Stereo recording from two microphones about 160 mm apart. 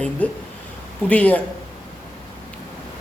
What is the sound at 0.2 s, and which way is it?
A man's voice, 10° left (ahead or behind).